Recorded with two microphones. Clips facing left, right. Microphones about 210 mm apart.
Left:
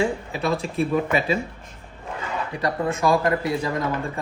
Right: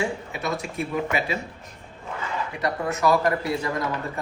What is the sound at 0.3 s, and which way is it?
Speech, 30° left (ahead or behind).